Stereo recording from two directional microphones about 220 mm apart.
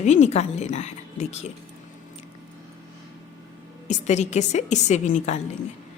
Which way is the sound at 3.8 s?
30° left (ahead or behind).